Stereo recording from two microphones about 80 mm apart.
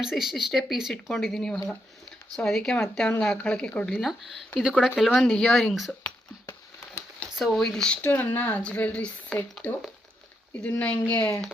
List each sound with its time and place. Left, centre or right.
0.0 s speech: centre
3.8 s speech: centre
7.3 s speech: centre
8.0 s speech: left